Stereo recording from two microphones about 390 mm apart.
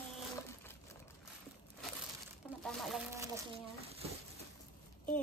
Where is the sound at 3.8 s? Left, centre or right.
Centre.